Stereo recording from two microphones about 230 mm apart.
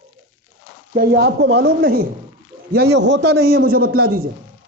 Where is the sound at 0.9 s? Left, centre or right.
Right.